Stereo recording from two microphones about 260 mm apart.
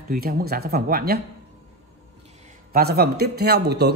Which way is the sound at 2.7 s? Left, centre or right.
Right.